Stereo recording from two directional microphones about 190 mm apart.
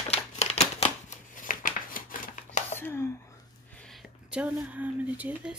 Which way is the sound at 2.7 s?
10° left (ahead or behind).